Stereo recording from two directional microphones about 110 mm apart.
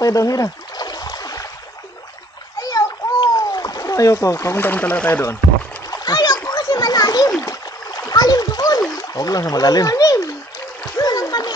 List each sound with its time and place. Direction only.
0.0 s a sound: 30° left (ahead or behind)
2.6 s splash: 35° left (ahead or behind)
5.9 s splash: 40° left (ahead or behind)
9.1 s speech: 35° left (ahead or behind)
11.0 s splash: 35° left (ahead or behind)